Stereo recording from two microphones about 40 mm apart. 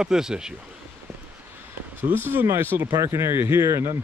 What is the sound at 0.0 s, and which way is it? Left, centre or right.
Speech, centre.